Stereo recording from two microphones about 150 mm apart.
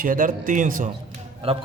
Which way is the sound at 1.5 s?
40° right (ahead or behind).